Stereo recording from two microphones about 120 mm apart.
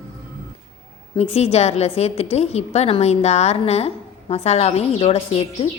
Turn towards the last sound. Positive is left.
turn(degrees=50)  # may be behind; listen again after turning